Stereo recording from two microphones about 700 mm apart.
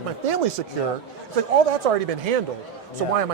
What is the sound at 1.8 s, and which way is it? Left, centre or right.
Speech, right.